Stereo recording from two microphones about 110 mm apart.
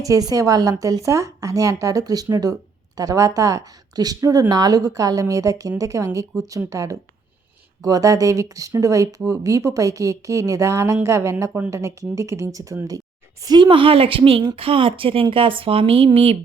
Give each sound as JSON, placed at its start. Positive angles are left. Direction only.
{"t": 0.0, "sound": "speech", "side_deg": -35}
{"t": 13.5, "sound": "a woman's voice", "side_deg": -50}